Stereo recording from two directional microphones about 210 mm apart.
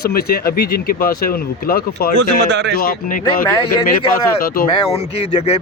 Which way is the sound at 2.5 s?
55° right (ahead or behind).